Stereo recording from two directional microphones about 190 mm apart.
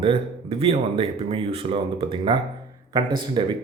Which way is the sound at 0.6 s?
30° right (ahead or behind).